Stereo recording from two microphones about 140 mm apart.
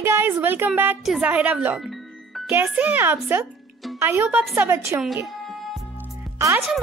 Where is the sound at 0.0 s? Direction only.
20° right (ahead or behind).